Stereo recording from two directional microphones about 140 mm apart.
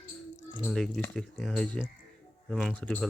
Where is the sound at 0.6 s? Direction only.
5° left (ahead or behind).